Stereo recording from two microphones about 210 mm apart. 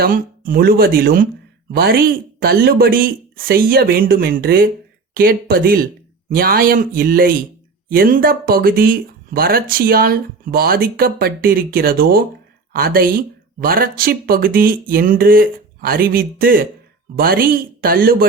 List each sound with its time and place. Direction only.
0.0 s speech: 45° right (ahead or behind)